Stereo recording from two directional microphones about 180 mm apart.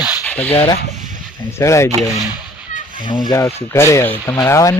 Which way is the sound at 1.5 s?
15° left (ahead or behind).